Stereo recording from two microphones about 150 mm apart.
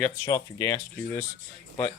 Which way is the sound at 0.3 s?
20° left (ahead or behind).